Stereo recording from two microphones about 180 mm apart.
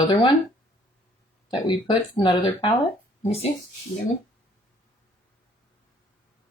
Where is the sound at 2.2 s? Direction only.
25° left (ahead or behind).